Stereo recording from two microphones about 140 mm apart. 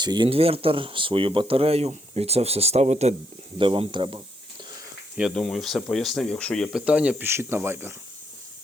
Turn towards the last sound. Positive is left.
turn(degrees=-15)  # may be behind; listen again after turning